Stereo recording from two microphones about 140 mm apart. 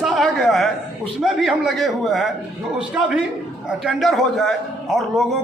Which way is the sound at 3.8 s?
Centre (ahead or behind).